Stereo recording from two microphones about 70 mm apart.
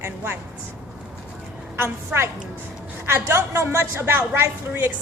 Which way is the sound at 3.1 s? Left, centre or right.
Right.